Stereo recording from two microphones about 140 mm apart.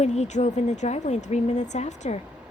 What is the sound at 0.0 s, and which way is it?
Speech, 55° left (ahead or behind).